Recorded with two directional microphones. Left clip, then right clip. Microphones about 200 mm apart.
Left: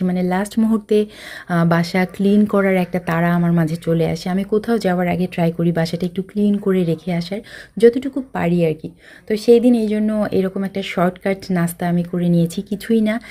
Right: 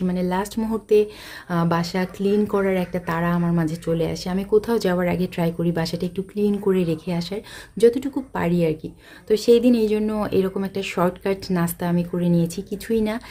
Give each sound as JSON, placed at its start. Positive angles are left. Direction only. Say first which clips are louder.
{"t": 0.0, "sound": "speech", "louder": "left 3 dB", "side_deg": 15}